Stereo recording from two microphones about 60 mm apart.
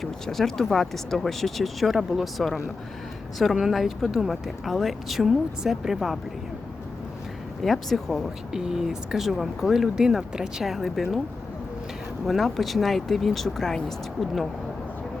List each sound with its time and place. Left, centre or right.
0.0 s speech: centre
7.6 s speech: centre
8.5 s speech: centre
12.2 s speech: centre